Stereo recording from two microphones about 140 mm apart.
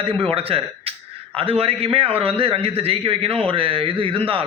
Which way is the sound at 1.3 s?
45° right (ahead or behind).